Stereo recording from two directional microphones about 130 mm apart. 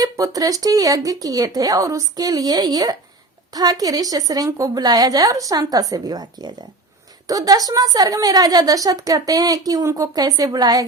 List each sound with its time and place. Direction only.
0.0 s a woman's voice: 30° right (ahead or behind)